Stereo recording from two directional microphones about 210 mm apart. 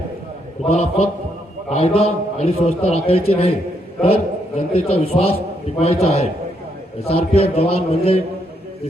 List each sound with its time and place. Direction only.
0.6 s a man's voice: 30° left (ahead or behind)